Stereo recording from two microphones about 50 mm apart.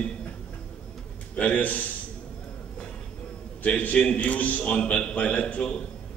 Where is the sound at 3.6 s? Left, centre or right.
Left.